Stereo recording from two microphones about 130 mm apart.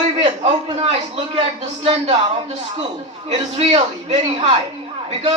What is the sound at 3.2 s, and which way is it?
A man's voice, 50° right (ahead or behind).